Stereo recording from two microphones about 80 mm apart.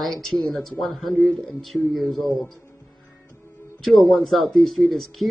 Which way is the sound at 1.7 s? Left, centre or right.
Centre.